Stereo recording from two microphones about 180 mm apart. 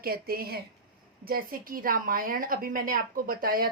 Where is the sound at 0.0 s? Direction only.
55° right (ahead or behind).